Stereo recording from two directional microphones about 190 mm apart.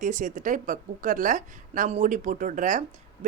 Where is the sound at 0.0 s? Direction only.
40° right (ahead or behind).